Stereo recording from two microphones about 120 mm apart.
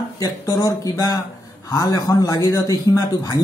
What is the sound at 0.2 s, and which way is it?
Speech, 30° left (ahead or behind).